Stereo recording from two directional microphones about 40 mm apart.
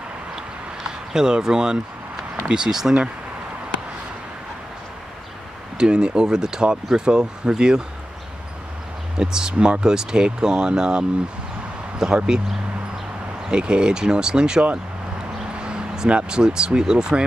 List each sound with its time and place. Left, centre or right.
1.1 s speech: centre
5.8 s speech: right
9.1 s speech: centre
13.5 s speech: right